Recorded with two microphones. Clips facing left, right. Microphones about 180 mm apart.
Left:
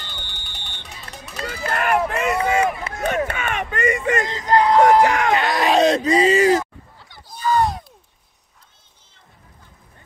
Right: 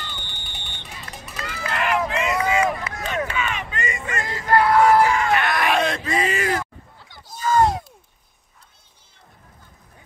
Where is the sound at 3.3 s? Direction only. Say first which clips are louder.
Left 2 dB; 55° left (ahead or behind).